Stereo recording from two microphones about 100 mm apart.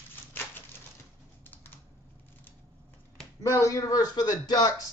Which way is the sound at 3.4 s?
30° left (ahead or behind).